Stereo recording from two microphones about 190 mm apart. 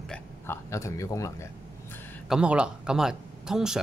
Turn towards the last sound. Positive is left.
turn(degrees=-5)  # may be behind; listen again after turning